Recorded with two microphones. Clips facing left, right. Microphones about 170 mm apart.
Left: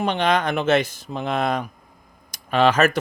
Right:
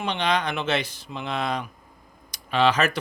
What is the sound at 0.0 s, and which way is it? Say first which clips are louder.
Speech: left 4 dB; 50° left (ahead or behind).